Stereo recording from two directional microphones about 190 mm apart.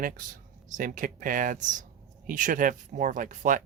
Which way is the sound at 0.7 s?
45° right (ahead or behind).